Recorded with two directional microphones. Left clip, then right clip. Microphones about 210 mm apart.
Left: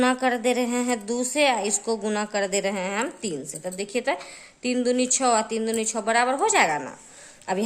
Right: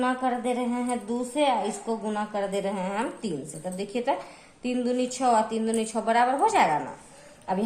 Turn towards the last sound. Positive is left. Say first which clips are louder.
# left 2 dB
turn(degrees=40)  # may be behind; listen again after turning